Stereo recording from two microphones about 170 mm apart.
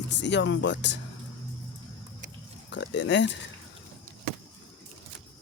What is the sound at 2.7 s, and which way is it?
Speech, 90° left.